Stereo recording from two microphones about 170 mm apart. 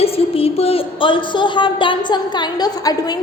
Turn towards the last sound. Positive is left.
turn(degrees=20)  # may be behind; listen again after turning